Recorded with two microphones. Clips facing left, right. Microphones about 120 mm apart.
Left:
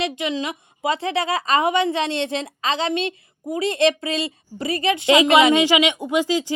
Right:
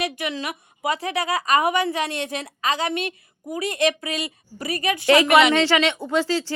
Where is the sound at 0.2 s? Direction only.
20° left (ahead or behind).